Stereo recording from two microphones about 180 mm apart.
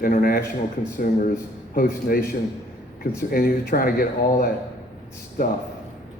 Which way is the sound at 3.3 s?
55° left (ahead or behind).